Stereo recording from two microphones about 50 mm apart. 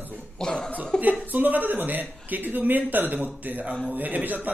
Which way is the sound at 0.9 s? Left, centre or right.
Right.